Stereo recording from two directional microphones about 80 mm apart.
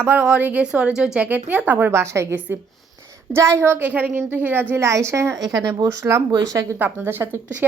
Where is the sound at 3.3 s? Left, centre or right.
Right.